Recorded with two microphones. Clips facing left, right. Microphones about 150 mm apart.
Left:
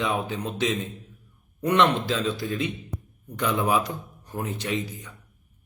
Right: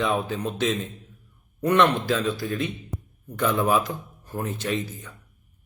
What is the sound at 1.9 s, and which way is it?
A man's voice, 20° left (ahead or behind).